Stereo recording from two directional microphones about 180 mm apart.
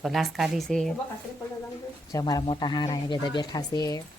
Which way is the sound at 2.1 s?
20° left (ahead or behind).